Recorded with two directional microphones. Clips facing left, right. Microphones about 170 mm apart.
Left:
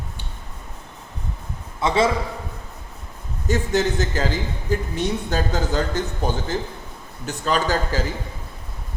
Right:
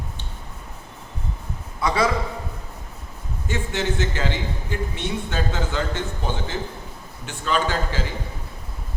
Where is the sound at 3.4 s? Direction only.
40° left (ahead or behind).